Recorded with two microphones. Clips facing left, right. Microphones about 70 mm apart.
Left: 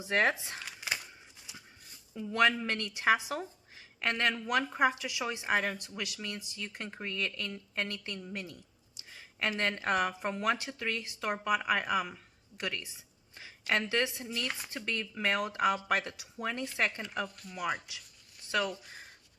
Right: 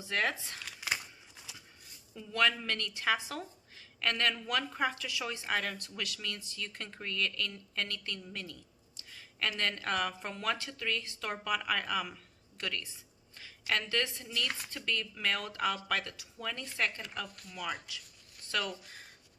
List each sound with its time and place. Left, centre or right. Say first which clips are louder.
0.0 s speech: left 4 dB; left
2.1 s speech: left 3 dB; left